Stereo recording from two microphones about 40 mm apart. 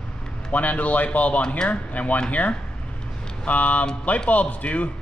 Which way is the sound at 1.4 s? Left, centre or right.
Left.